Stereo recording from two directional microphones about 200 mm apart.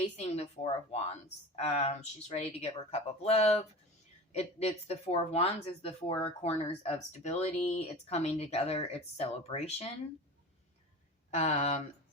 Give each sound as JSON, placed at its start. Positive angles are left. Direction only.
{"t": 0.2, "sound": "a woman's voice", "side_deg": 30}
{"t": 11.3, "sound": "a woman's voice", "side_deg": 35}